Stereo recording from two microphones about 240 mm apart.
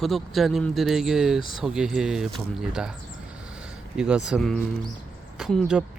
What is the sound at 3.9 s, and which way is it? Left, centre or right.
Speech, centre.